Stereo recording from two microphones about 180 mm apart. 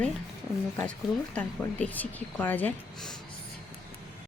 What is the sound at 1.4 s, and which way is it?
Speech, 10° left (ahead or behind).